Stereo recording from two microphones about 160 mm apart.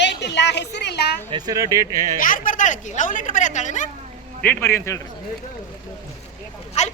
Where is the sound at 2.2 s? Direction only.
55° left (ahead or behind).